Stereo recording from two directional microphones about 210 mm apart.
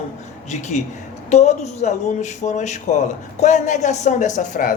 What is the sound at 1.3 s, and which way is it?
A man's voice, 30° left (ahead or behind).